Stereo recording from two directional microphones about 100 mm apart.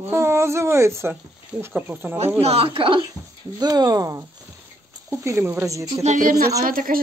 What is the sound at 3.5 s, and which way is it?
Speech, 40° right (ahead or behind).